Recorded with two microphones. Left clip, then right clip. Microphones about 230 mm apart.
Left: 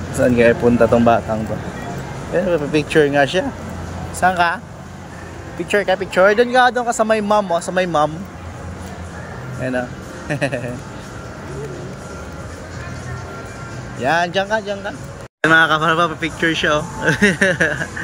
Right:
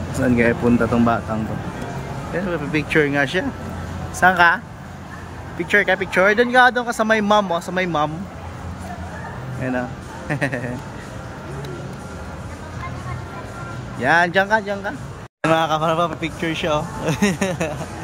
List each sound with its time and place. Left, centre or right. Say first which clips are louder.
0.2 s speech: left 5 dB; centre
2.3 s speech: left 6 dB; centre
5.6 s speech: even; centre
9.6 s speech: left 3 dB; centre
14.0 s speech: right 1 dB; centre